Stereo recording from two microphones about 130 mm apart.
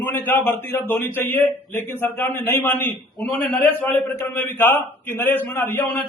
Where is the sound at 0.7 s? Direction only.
15° left (ahead or behind).